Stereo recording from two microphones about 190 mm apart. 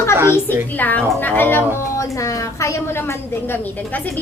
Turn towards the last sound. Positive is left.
turn(degrees=10)  # may be behind; listen again after turning